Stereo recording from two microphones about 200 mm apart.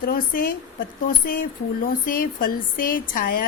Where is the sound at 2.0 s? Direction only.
45° left (ahead or behind).